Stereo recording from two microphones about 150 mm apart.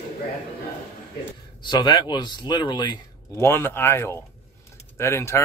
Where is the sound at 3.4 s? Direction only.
15° left (ahead or behind).